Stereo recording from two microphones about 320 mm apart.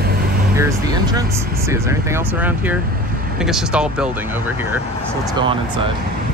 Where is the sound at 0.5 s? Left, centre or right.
Centre.